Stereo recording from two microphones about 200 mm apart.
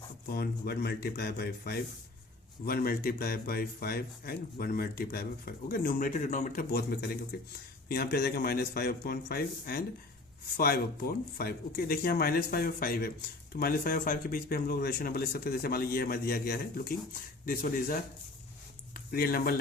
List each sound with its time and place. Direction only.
0.3 s speech: 50° left (ahead or behind)